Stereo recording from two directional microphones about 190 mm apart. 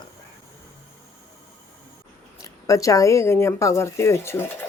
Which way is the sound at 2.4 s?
15° left (ahead or behind).